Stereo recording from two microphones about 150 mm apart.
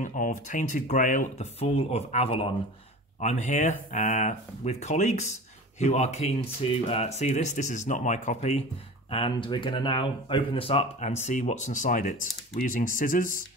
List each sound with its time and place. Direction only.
0.0 s speech: 55° left (ahead or behind)
1.6 s speech: 45° left (ahead or behind)
3.2 s speech: 50° left (ahead or behind)
9.1 s speech: 35° left (ahead or behind); by 13.4 s 65° left (ahead or behind)